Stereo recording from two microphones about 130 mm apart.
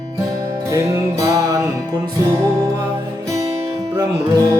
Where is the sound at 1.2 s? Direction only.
25° right (ahead or behind).